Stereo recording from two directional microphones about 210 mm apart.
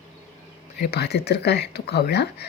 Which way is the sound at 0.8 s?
50° left (ahead or behind).